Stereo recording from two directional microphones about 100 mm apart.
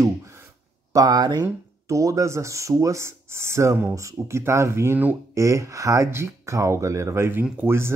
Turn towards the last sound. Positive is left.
turn(degrees=-25)  # may be behind; listen again after turning